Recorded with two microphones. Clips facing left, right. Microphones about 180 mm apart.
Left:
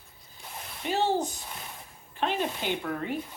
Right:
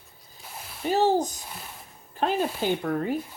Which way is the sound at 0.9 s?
40° right (ahead or behind).